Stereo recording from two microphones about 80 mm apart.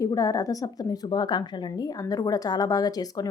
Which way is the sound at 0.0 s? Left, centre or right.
Left.